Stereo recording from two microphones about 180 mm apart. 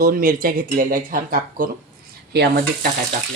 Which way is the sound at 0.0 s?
50° right (ahead or behind).